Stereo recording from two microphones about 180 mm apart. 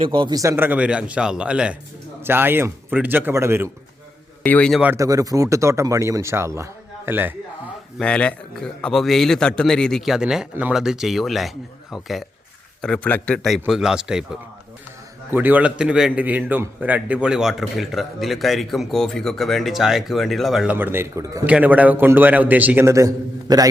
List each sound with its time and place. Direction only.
0.0 s speech: 30° right (ahead or behind)
4.4 s a man's voice: 5° left (ahead or behind)
4.8 s speech: 15° right (ahead or behind)
7.9 s a man's voice: 5° left (ahead or behind)
15.3 s a man's voice: 10° right (ahead or behind)